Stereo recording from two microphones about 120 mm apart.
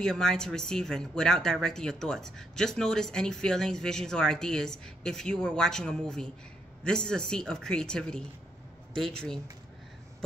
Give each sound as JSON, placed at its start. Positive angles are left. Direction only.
{"t": 0.0, "sound": "speech", "side_deg": 5}